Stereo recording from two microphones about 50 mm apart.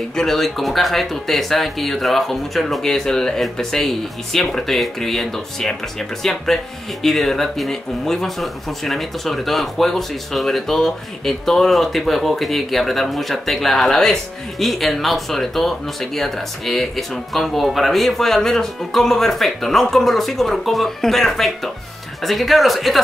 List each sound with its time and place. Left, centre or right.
0.1 s speech: centre